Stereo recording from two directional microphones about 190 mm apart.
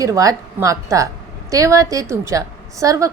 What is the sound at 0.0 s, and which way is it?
A woman's voice, 20° right (ahead or behind).